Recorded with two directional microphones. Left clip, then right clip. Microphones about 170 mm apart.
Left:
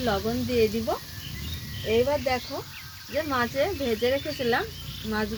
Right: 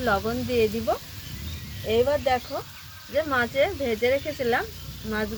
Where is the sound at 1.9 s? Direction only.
Centre (ahead or behind).